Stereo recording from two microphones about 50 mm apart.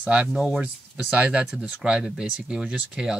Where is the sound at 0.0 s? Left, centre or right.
Right.